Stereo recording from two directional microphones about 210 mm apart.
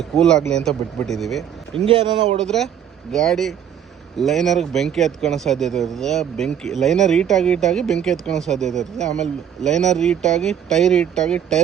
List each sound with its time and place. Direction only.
0.2 s speech: 5° left (ahead or behind)
1.9 s speech: 25° right (ahead or behind)
2.4 s speech: 5° left (ahead or behind)